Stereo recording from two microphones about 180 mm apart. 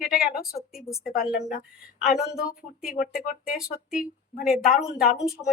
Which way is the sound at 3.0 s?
50° left (ahead or behind).